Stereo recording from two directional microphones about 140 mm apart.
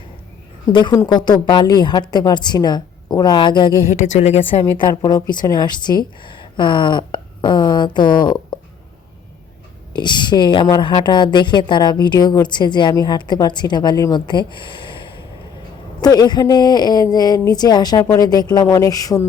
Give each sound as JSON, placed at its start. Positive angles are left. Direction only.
{"t": 0.7, "sound": "a woman's voice", "side_deg": 35}
{"t": 3.9, "sound": "speech", "side_deg": 55}
{"t": 4.8, "sound": "a woman's voice", "side_deg": 30}
{"t": 9.9, "sound": "a woman's voice", "side_deg": 35}